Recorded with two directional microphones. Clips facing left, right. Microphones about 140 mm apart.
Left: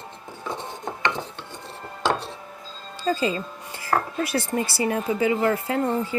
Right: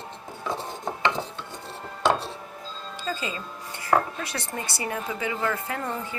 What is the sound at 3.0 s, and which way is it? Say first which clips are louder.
Speech: left 8 dB; 30° left (ahead or behind).